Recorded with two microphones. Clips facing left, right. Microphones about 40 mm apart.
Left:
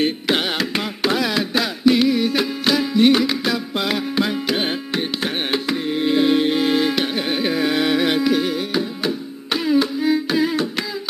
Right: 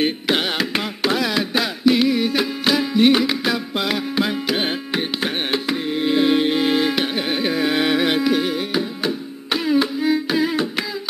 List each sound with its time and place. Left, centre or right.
0.0 s carnatic music: centre
7.7 s music: centre